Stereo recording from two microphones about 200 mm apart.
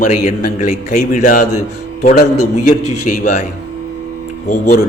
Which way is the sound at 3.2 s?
40° left (ahead or behind).